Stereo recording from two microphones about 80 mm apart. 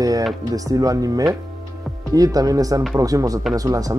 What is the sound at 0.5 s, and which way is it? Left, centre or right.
Speech, right.